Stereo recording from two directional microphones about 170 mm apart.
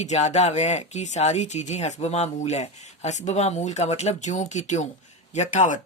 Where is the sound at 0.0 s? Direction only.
40° left (ahead or behind).